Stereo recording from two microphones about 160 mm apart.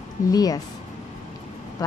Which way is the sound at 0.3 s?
25° left (ahead or behind).